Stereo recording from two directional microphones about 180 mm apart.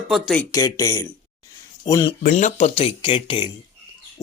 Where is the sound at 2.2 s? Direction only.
40° left (ahead or behind).